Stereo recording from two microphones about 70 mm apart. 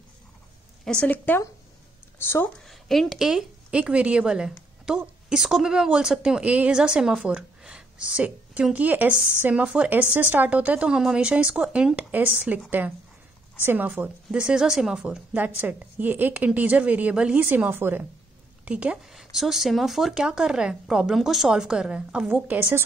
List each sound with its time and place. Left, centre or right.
1.0 s speech: left
2.6 s a woman's voice: centre
3.7 s a woman's voice: centre
9.8 s a woman's voice: right
11.9 s a woman's voice: right
14.3 s a woman's voice: centre
15.4 s a woman's voice: right
18.7 s a woman's voice: centre
19.1 s a woman's voice: centre
22.3 s a woman's voice: right